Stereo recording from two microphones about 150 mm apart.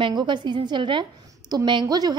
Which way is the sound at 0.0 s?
30° right (ahead or behind).